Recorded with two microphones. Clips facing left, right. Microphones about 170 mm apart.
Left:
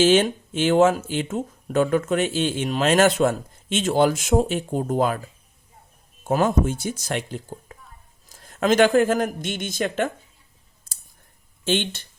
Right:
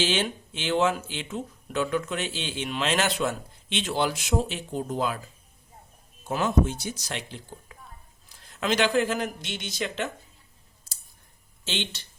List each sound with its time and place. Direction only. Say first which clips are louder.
0.0 s speech: left 10 dB; 45° left (ahead or behind)
6.2 s speech: left 4 dB; 50° left (ahead or behind)
10.9 s clicking: left 2 dB; 50° left (ahead or behind)
11.6 s speech: left 9 dB; 50° left (ahead or behind)